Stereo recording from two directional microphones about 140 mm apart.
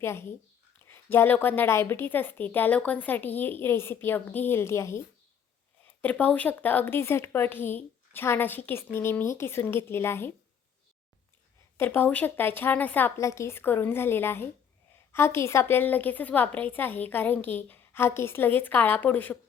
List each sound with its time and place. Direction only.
0.0 s speech: 15° left (ahead or behind)
11.8 s speech: 15° left (ahead or behind)